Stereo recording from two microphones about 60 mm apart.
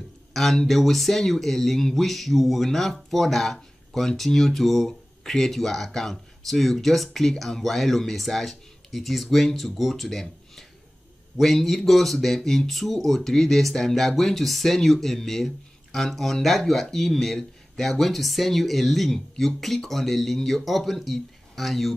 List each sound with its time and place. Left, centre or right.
0.3 s speech: centre
11.3 s speech: centre